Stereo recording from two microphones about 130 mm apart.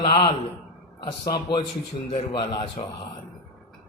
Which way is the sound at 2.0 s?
40° left (ahead or behind).